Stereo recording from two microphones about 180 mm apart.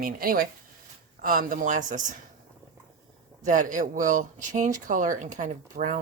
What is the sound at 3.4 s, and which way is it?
Speech, 45° right (ahead or behind).